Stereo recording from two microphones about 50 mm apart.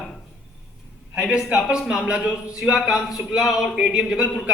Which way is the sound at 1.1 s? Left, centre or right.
Centre.